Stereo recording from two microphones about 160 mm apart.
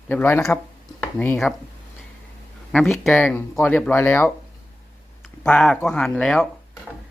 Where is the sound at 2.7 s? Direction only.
Centre (ahead or behind).